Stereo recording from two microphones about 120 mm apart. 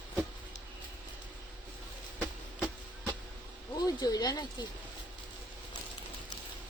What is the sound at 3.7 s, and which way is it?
Speech, 35° left (ahead or behind).